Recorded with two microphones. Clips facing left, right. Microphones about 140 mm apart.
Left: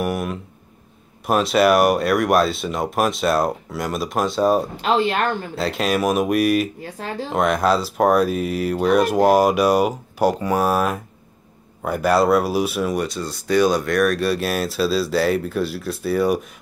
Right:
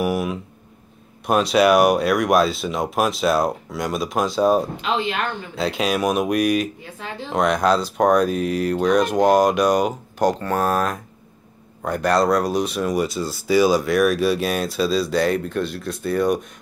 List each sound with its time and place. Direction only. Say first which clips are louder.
0.0 s speech: right 2 dB; centre (ahead or behind)
4.8 s speech: left 4 dB; 40° left (ahead or behind)
5.6 s speech: right 1 dB; centre (ahead or behind)
6.8 s speech: left 4 dB; 40° left (ahead or behind)
7.3 s speech: even; centre (ahead or behind)